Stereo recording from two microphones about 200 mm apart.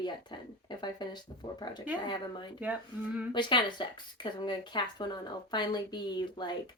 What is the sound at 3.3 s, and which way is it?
Speech, 25° left (ahead or behind).